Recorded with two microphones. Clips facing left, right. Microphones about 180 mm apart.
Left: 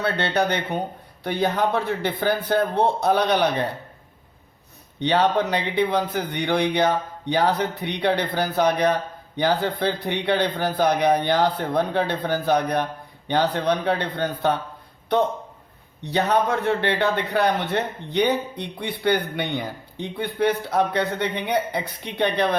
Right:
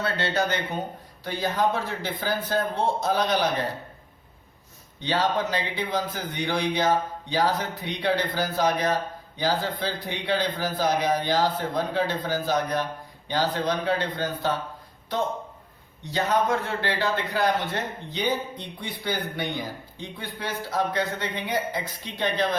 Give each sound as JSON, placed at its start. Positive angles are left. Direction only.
{"t": 0.0, "sound": "a man's voice", "side_deg": 60}
{"t": 4.9, "sound": "a man's voice", "side_deg": 60}
{"t": 16.0, "sound": "a man's voice", "side_deg": 65}